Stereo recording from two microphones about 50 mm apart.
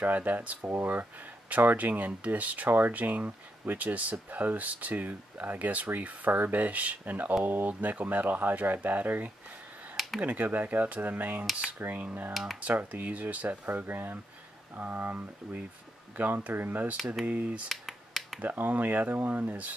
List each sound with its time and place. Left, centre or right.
0.0 s speech: right
0.7 s speech: right
13.7 s speech: right
17.6 s finger snapping: centre
18.4 s speech: right